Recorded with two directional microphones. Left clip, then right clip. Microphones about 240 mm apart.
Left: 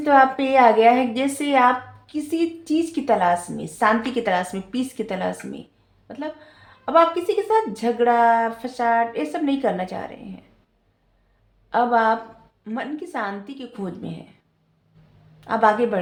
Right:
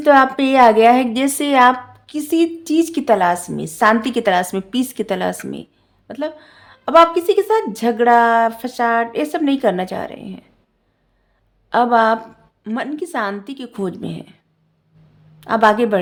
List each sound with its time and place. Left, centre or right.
0.0 s a woman's voice: right
11.7 s a woman's voice: right
15.4 s a woman's voice: right